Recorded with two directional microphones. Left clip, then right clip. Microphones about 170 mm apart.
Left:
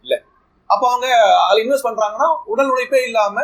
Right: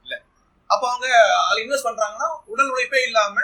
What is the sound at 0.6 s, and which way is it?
A man's voice, 20° left (ahead or behind).